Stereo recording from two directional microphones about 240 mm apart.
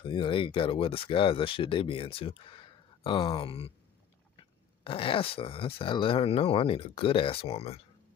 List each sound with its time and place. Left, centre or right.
0.0 s speech: left